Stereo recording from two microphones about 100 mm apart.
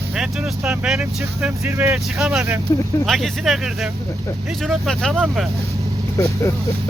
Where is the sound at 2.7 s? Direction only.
30° left (ahead or behind).